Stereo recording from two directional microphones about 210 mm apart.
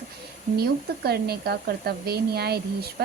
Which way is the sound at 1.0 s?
50° right (ahead or behind).